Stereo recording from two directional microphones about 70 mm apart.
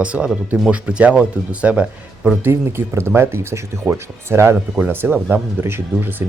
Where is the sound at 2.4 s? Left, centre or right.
Right.